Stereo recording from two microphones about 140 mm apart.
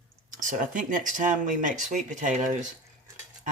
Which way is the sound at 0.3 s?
65° right (ahead or behind).